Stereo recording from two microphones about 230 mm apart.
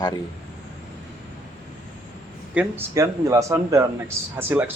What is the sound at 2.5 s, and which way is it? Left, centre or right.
Speech, centre.